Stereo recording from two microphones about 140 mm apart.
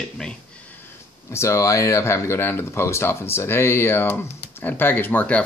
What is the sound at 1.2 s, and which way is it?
Speech, 20° left (ahead or behind).